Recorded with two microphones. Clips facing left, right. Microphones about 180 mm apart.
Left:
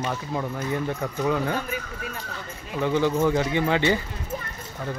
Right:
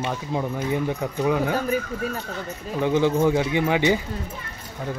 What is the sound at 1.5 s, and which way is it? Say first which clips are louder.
Speech: right 6 dB; 40° right (ahead or behind).